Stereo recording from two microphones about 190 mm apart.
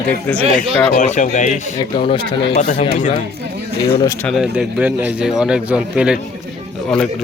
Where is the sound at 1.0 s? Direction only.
40° left (ahead or behind).